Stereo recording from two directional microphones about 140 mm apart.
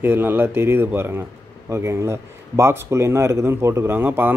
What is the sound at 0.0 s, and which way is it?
Speech, 15° right (ahead or behind).